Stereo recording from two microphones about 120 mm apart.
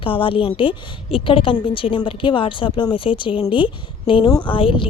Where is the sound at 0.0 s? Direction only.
45° left (ahead or behind).